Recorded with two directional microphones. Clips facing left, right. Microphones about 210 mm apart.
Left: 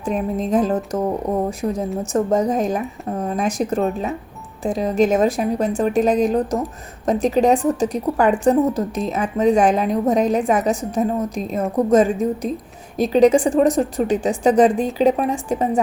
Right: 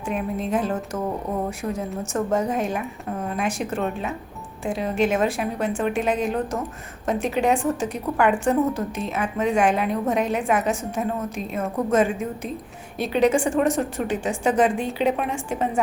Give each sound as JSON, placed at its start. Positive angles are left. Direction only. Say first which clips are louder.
{"t": 0.0, "sound": "a woman's voice", "louder": "left 4 dB", "side_deg": 35}